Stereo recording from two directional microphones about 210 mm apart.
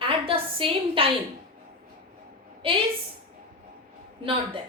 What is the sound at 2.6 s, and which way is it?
Speech, 25° right (ahead or behind).